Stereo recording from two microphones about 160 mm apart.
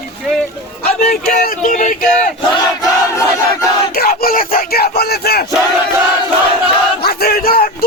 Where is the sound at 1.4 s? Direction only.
55° left (ahead or behind).